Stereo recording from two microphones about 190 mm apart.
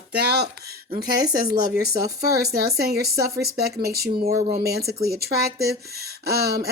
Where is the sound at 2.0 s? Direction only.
55° right (ahead or behind).